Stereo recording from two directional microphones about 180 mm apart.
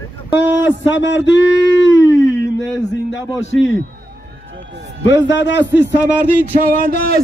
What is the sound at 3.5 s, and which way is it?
Music, 90° left.